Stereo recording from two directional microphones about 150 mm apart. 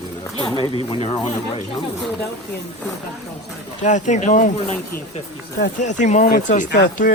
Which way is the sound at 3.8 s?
55° left (ahead or behind).